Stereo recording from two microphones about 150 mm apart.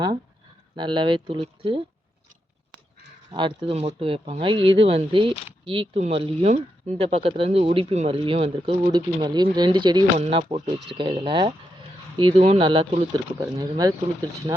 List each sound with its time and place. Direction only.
0.8 s speech: 30° right (ahead or behind)
3.3 s speech: 35° right (ahead or behind)
8.9 s speech: 30° right (ahead or behind)